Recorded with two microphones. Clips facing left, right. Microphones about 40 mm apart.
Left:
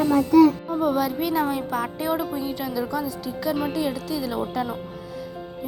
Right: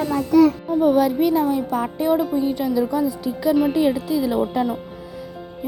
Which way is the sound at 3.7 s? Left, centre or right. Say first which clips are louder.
Right 7 dB; right.